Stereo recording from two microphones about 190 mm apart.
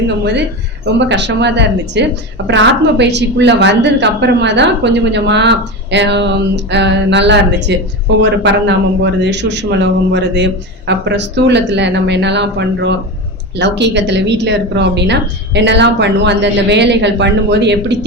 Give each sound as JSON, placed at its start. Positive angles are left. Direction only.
{"t": 0.9, "sound": "a woman's voice", "side_deg": -65}